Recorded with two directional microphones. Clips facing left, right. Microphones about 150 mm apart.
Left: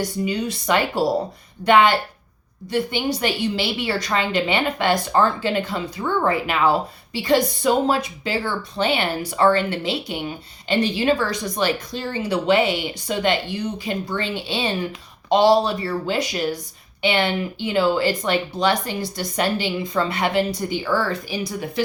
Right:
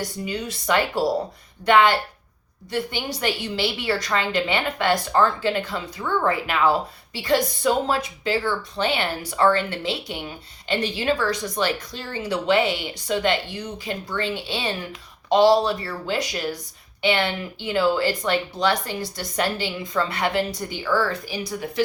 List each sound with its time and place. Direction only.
0.3 s a woman's voice: 20° left (ahead or behind)